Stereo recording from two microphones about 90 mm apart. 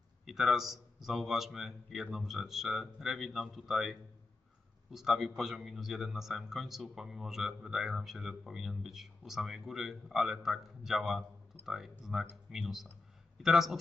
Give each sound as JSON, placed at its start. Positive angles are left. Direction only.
{"t": 0.2, "sound": "a man's voice", "side_deg": -5}
{"t": 4.9, "sound": "a man's voice", "side_deg": -5}